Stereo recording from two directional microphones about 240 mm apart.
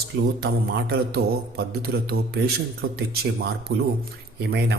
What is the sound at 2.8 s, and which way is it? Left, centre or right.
Speech, right.